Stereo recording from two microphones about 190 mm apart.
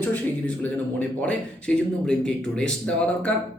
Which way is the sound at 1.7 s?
5° left (ahead or behind).